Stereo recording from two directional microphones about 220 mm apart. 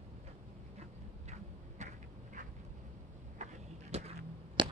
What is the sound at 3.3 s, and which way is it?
Vehicle, 30° right (ahead or behind).